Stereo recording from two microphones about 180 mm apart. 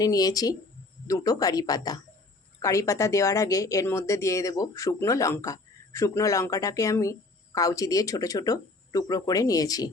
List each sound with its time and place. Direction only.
0.0 s speech: 20° left (ahead or behind)